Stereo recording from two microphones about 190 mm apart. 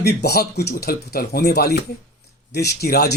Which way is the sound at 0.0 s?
60° left (ahead or behind).